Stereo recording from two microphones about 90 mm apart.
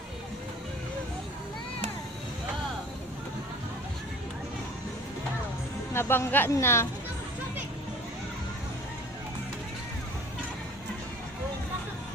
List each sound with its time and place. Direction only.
5.9 s speech: 25° left (ahead or behind)